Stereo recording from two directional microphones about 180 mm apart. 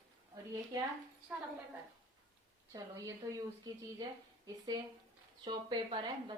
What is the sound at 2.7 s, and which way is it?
Speech, 20° right (ahead or behind).